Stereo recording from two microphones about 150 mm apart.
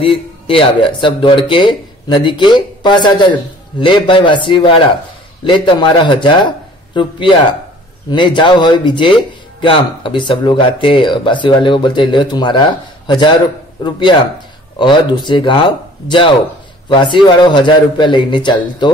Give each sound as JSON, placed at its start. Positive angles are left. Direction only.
{"t": 0.0, "sound": "a man's voice", "side_deg": 35}